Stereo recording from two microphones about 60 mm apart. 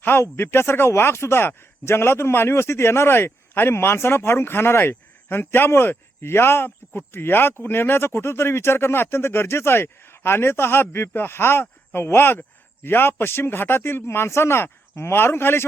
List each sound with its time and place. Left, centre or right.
0.0 s speech: left